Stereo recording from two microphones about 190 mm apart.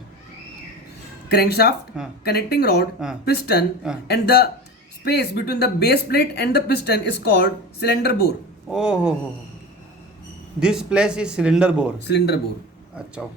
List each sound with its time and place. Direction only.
1.3 s speech: 55° left (ahead or behind)
8.7 s a man's voice: 5° right (ahead or behind)
10.6 s a man's voice: 5° right (ahead or behind)
12.0 s speech: 60° left (ahead or behind)